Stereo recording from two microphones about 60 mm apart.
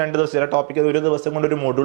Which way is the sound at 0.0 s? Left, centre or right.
Right.